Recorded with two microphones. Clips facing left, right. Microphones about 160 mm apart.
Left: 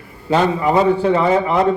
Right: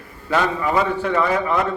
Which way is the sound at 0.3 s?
25° left (ahead or behind).